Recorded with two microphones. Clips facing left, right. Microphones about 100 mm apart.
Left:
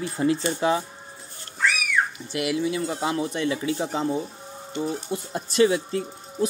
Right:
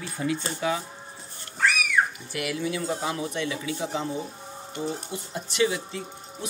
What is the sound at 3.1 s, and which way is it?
Speech, 35° left (ahead or behind).